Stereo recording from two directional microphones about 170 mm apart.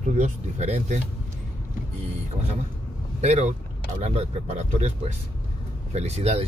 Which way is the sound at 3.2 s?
40° right (ahead or behind).